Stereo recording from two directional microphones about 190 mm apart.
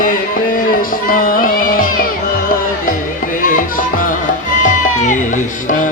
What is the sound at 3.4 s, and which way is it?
Music, 45° left (ahead or behind).